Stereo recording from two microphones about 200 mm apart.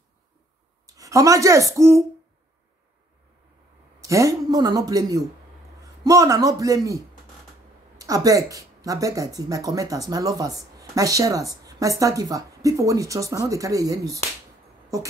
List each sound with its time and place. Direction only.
0.8 s speech: 15° right (ahead or behind)
4.0 s a man's voice: 15° right (ahead or behind)
8.0 s speech: 15° right (ahead or behind)